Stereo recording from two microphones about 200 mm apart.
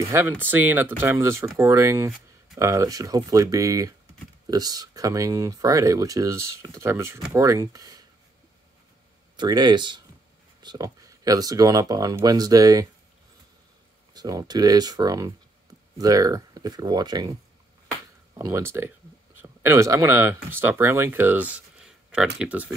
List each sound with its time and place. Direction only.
0.1 s speech: 10° right (ahead or behind)
9.4 s speech: 20° right (ahead or behind)
14.1 s speech: 20° right (ahead or behind)